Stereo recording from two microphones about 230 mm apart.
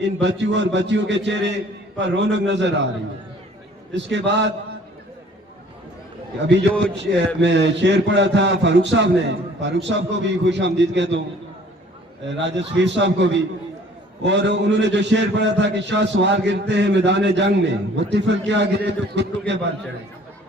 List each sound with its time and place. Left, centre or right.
0.0 s a man's voice: right
3.9 s a man's voice: right
6.5 s a man's voice: right
12.3 s a man's voice: right